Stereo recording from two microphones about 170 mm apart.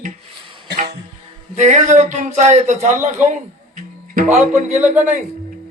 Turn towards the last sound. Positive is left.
turn(degrees=-45)  # may be behind; listen again after turning